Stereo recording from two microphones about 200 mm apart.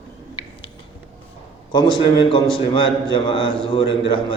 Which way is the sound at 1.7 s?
25° left (ahead or behind).